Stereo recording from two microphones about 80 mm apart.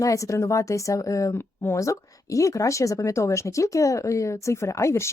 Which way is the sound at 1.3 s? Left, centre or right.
Left.